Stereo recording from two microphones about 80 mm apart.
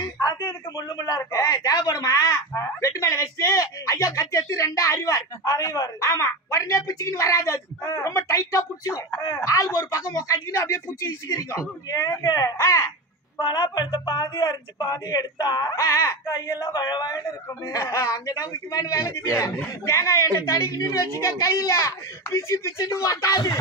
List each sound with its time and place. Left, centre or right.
0.0 s a sound: left
0.7 s a woman's voice: left
13.4 s speech: left
15.7 s a woman's voice: left
16.3 s speech: left
16.6 s speech: left
17.3 s a woman's voice: left